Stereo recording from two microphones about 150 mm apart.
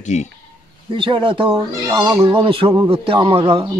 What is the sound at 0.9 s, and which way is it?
Speech, 35° right (ahead or behind).